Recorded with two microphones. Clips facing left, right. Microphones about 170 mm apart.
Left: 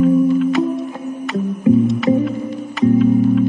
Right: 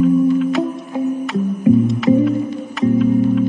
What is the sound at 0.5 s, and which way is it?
Music, centre (ahead or behind).